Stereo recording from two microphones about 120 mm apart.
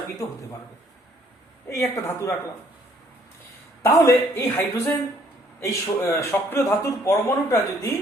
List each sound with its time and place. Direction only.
1.6 s a man's voice: 25° left (ahead or behind)
3.8 s a man's voice: 25° left (ahead or behind)